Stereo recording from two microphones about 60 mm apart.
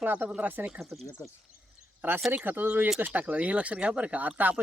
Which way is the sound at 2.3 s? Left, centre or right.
Right.